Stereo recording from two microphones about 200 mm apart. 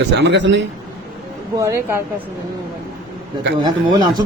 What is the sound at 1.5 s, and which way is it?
Speech, 15° right (ahead or behind).